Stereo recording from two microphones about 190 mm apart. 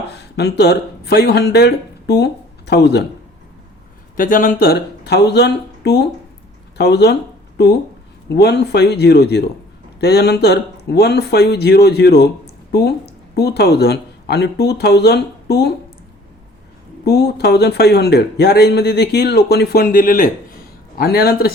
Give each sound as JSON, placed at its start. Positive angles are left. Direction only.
{"t": 0.1, "sound": "speech", "side_deg": 60}
{"t": 4.2, "sound": "a man's voice", "side_deg": 45}
{"t": 17.1, "sound": "a man's voice", "side_deg": 60}